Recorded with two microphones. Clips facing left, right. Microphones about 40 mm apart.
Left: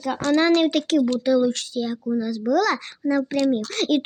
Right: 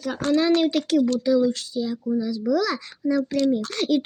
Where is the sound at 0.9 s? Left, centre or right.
Left.